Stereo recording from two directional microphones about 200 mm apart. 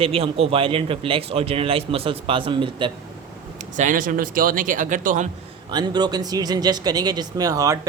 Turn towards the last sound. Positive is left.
turn(degrees=-15)  # may be behind; listen again after turning